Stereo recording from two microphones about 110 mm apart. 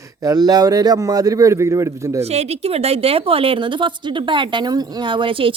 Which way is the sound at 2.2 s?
70° right (ahead or behind).